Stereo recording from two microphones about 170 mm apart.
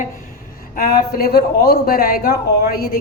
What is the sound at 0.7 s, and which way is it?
A woman's voice, 60° left (ahead or behind).